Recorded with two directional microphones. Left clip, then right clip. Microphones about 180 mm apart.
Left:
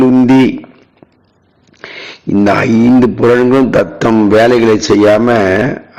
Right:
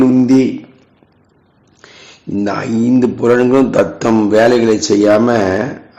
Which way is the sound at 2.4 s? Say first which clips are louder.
Left 7 dB; 25° left (ahead or behind).